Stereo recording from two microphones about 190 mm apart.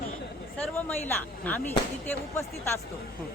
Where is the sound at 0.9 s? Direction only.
10° left (ahead or behind).